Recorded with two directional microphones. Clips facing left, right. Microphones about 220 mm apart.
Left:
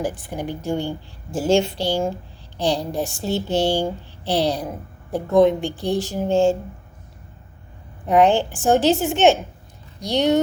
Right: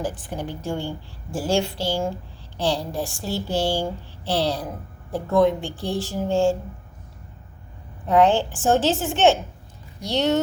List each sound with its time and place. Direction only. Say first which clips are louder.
0.0 s a woman's voice: left 3 dB; 10° left (ahead or behind)
8.0 s speech: left 2 dB; 15° left (ahead or behind)